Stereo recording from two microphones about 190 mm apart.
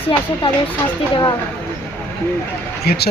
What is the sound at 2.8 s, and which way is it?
Speech, 55° left (ahead or behind).